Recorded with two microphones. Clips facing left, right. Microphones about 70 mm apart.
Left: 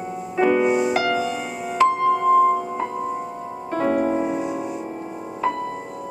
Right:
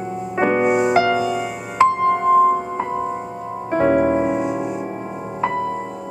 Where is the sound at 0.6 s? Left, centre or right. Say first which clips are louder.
Right 2 dB; right.